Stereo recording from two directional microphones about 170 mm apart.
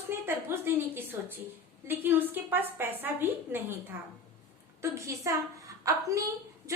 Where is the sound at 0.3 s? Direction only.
15° right (ahead or behind).